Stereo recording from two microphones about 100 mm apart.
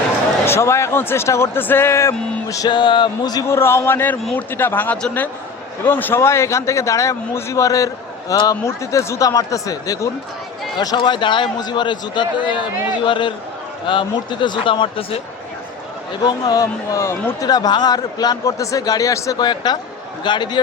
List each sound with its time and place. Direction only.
0.4 s speech: 25° left (ahead or behind)
2.6 s a man's voice: 50° left (ahead or behind)
3.4 s a man's voice: 25° left (ahead or behind)
10.8 s a man's voice: 50° left (ahead or behind)
16.2 s a man's voice: 40° left (ahead or behind)
17.4 s a man's voice: 40° left (ahead or behind)
19.4 s a man's voice: 45° left (ahead or behind)